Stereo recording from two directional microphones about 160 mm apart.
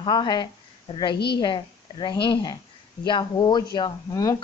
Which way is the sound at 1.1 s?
90° left.